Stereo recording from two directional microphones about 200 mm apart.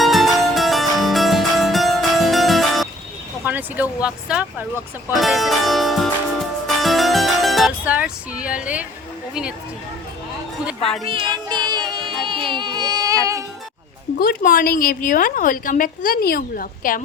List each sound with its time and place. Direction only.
0.0 s harpsichord: centre (ahead or behind)
3.4 s speech: 10° right (ahead or behind)
5.2 s music: centre (ahead or behind)
11.1 s music: 20° right (ahead or behind)
12.3 s a sound: 25° right (ahead or behind)
14.2 s a woman's voice: 45° left (ahead or behind)